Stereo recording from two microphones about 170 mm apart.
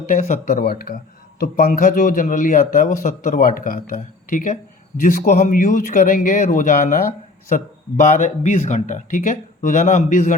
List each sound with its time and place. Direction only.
0.0 s speech: 50° left (ahead or behind)